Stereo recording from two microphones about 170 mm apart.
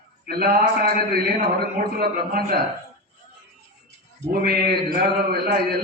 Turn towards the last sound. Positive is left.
turn(degrees=-65)  # may be behind; listen again after turning